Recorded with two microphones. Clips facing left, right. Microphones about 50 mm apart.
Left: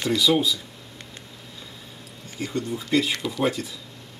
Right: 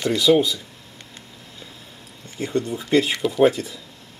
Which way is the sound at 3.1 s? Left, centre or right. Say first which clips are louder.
Right 5 dB; centre.